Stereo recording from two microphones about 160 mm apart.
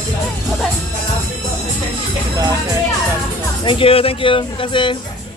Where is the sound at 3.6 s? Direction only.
35° left (ahead or behind).